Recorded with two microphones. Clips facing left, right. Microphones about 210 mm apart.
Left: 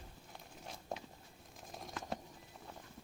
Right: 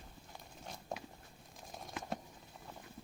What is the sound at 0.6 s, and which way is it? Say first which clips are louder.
Walk: even; centre (ahead or behind).